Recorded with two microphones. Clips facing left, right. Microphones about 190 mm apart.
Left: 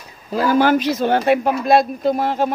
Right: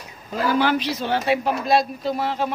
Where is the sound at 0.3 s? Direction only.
45° left (ahead or behind).